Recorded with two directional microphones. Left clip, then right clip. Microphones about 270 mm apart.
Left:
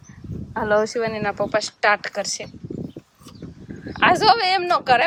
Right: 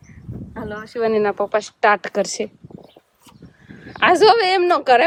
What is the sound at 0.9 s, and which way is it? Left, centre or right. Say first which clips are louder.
Speech: right 5 dB; centre.